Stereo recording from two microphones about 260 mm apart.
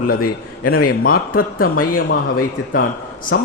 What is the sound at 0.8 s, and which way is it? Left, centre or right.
Speech, left.